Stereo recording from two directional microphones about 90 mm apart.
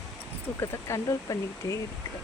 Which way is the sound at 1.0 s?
40° left (ahead or behind).